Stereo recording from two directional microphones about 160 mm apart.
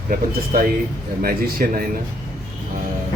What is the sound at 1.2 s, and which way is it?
Speech, 65° right (ahead or behind).